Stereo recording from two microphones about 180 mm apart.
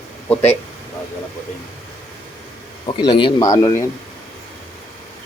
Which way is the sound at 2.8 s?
25° left (ahead or behind).